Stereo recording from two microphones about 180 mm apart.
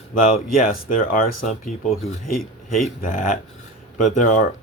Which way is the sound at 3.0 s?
45° left (ahead or behind).